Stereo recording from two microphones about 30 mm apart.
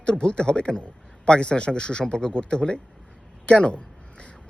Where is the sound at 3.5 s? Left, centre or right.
Left.